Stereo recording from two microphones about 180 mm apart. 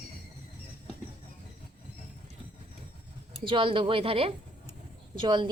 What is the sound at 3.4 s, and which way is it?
A woman's voice, 30° right (ahead or behind).